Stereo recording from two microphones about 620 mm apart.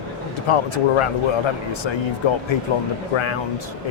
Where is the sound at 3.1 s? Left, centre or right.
Left.